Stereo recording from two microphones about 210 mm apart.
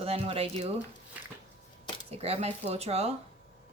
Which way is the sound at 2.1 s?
30° right (ahead or behind).